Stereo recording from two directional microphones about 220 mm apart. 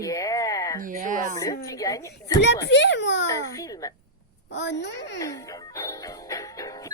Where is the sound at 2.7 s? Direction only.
55° left (ahead or behind).